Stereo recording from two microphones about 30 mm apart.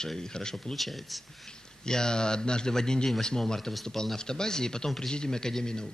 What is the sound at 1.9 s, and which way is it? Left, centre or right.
A man's voice, left.